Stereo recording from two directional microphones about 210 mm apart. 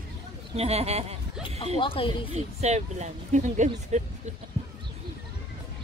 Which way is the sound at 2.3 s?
30° right (ahead or behind).